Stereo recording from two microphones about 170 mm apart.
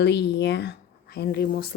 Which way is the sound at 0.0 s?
85° left.